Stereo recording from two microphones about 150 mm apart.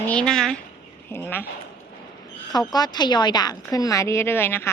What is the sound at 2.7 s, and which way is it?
A woman's voice, 25° left (ahead or behind).